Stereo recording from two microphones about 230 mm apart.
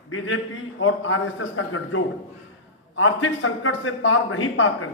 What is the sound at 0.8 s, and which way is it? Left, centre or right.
A man's voice, left.